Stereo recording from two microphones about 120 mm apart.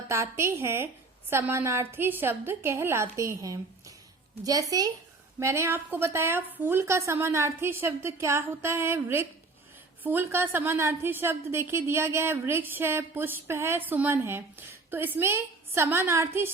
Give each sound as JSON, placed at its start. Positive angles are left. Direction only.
{"t": 0.1, "sound": "a woman's voice", "side_deg": -25}